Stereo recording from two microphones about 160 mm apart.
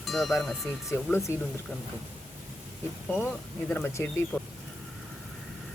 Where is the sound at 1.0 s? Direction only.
15° left (ahead or behind).